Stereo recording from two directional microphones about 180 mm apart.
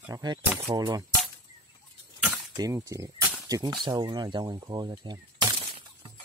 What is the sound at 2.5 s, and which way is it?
Speech, 20° right (ahead or behind).